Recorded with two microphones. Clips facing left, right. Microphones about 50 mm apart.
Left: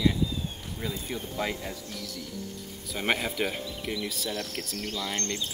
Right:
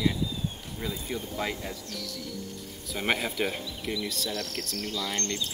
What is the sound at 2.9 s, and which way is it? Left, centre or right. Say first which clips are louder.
Speech: even; centre.